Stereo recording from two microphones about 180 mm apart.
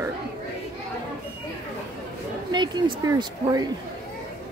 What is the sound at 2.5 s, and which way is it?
A woman's voice, 25° right (ahead or behind).